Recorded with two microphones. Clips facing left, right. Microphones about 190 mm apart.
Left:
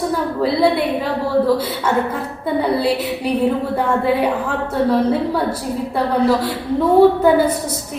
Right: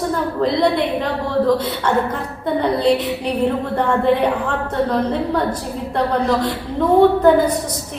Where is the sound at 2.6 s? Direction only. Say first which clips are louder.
Right 1 dB; 5° left (ahead or behind).